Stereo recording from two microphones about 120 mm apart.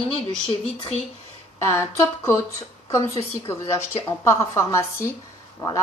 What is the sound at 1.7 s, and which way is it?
A woman's voice, 25° left (ahead or behind).